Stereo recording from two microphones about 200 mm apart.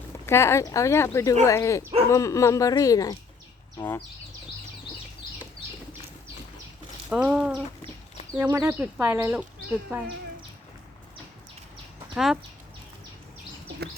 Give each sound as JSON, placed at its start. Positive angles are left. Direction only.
{"t": 0.3, "sound": "speech", "side_deg": 15}
{"t": 7.1, "sound": "speech", "side_deg": -5}
{"t": 12.1, "sound": "speech", "side_deg": 0}